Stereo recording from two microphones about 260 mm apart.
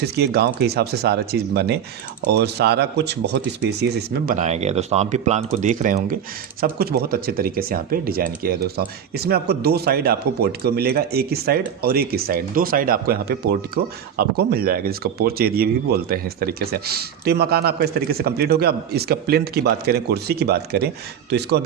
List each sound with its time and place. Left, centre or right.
0.0 s speech: right
4.4 s speech: right